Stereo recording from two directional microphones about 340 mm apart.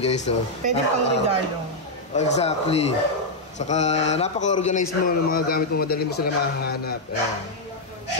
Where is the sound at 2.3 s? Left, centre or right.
Centre.